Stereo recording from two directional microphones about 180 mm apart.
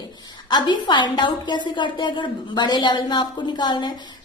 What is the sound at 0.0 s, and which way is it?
A woman's voice, 25° left (ahead or behind).